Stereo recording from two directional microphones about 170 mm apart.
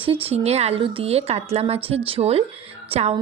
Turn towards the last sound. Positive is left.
turn(degrees=-35)  # may be behind; listen again after turning